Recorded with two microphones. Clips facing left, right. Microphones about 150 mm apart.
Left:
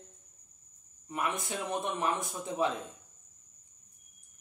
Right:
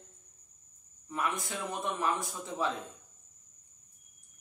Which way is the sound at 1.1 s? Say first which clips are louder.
Even; 20° left (ahead or behind).